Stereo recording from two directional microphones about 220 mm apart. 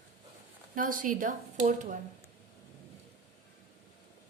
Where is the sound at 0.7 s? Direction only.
40° right (ahead or behind).